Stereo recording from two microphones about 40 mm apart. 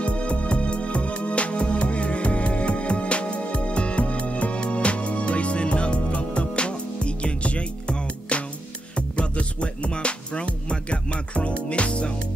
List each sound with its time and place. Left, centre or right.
0.0 s music: left